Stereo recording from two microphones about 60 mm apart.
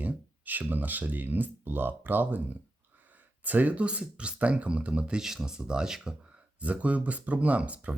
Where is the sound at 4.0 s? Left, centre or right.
Centre.